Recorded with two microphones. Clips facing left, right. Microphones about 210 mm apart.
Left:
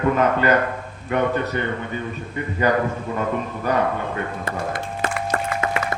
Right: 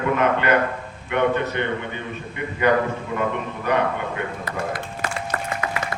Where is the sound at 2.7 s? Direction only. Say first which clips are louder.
Right 2 dB; 40° left (ahead or behind).